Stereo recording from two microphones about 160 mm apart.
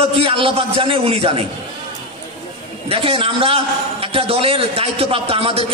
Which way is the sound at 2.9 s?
35° right (ahead or behind).